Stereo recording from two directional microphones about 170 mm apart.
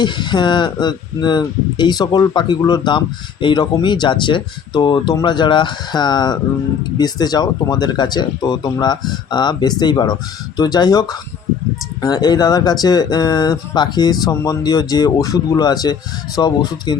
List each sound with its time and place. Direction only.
0.0 s speech: 25° left (ahead or behind)
12.0 s speech: 25° left (ahead or behind)